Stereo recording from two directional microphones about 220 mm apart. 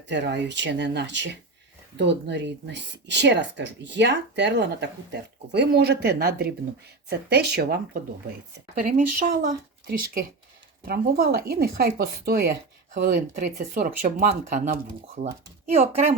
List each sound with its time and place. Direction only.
0.1 s speech: 50° right (ahead or behind); by 16.1 s 30° right (ahead or behind)